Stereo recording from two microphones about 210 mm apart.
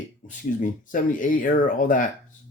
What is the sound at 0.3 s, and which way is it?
Speech, 40° left (ahead or behind).